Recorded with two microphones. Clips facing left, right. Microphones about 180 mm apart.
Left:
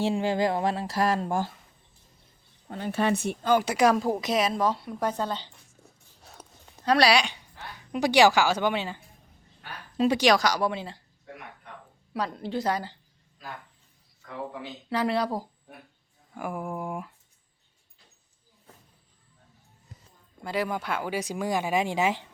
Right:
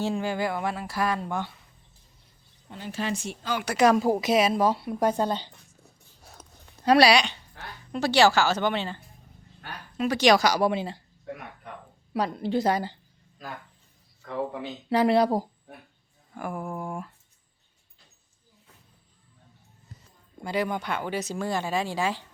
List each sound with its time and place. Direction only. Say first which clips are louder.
0.0 s speech: left 2 dB; 25° left (ahead or behind); by 1.5 s 45° left (ahead or behind)
2.6 s speech: left 5 dB; 55° left (ahead or behind)
3.8 s speech: right 5 dB; 5° left (ahead or behind)
4.2 s speech: right 3 dB; 5° right (ahead or behind)
6.8 s speech: right 3 dB; 10° right (ahead or behind)
7.1 s speech: right 1 dB; 10° left (ahead or behind)
10.2 s speech: right 7 dB; centre (ahead or behind)
12.1 s speech: right 4 dB; 15° right (ahead or behind)
14.8 s speech: right 6 dB; 15° right (ahead or behind)
16.3 s speech: even; 5° left (ahead or behind)
20.4 s speech: right 1 dB; centre (ahead or behind); by 22.3 s 20° left (ahead or behind)